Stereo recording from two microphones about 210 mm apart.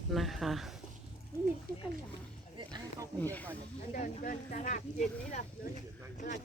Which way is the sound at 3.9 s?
40° left (ahead or behind).